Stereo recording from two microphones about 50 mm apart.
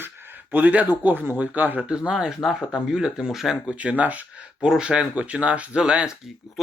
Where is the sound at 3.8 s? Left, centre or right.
Right.